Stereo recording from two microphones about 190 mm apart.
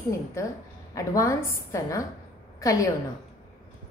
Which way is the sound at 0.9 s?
15° left (ahead or behind).